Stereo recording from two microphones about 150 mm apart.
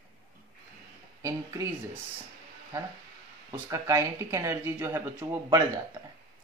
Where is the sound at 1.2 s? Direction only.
20° right (ahead or behind).